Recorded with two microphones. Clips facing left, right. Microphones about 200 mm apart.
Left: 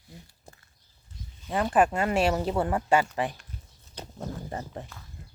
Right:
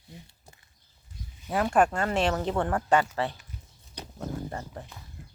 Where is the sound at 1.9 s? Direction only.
10° left (ahead or behind).